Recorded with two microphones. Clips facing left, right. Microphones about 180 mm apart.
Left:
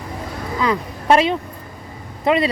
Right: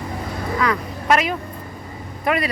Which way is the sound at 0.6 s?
30° left (ahead or behind).